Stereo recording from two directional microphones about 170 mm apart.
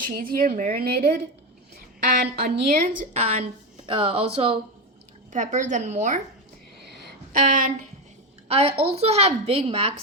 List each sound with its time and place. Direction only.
0.1 s speech: 60° right (ahead or behind)
3.0 s speech: 40° right (ahead or behind)
5.3 s a woman's voice: 45° right (ahead or behind)
7.3 s a woman's voice: 50° right (ahead or behind)
8.4 s a woman's voice: 35° right (ahead or behind)